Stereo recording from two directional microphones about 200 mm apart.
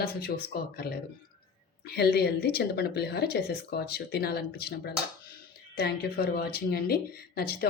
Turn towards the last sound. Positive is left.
turn(degrees=50)  # may be behind; listen again after turning